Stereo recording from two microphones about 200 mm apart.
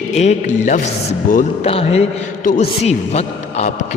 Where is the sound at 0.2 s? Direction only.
35° left (ahead or behind).